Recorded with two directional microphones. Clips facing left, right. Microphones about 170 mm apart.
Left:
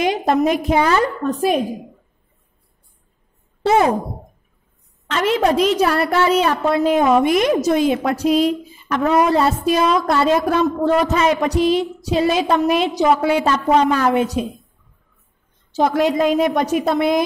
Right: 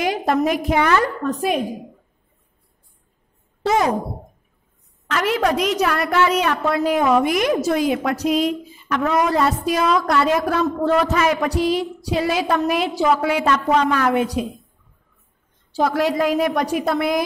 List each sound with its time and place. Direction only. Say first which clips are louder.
0.0 s a woman's voice: left 2 dB; 20° left (ahead or behind)
3.6 s speech: left 3 dB; 30° left (ahead or behind)
5.0 s a woman's voice: left 3 dB; 25° left (ahead or behind)
15.7 s a woman's voice: left 2 dB; 20° left (ahead or behind)